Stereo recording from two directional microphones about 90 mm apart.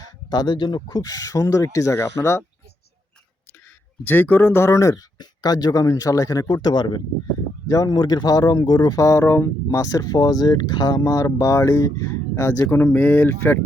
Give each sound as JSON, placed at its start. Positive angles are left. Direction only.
{"t": 0.0, "sound": "speech", "side_deg": 50}
{"t": 4.0, "sound": "speech", "side_deg": 20}
{"t": 5.1, "sound": "speech", "side_deg": 50}
{"t": 6.5, "sound": "speech", "side_deg": 55}
{"t": 7.7, "sound": "speech", "side_deg": 40}
{"t": 7.9, "sound": "speech", "side_deg": 50}
{"t": 9.6, "sound": "speech", "side_deg": 40}
{"t": 12.7, "sound": "speech", "side_deg": 20}